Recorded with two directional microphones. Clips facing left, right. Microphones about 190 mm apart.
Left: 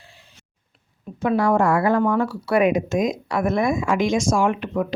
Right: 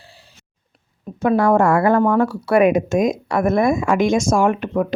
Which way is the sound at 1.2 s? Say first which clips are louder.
Right 4 dB; 45° right (ahead or behind).